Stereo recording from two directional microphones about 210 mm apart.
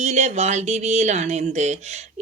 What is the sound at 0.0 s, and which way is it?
Speech, 30° right (ahead or behind).